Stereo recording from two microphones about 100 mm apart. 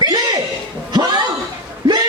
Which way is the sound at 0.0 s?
45° right (ahead or behind).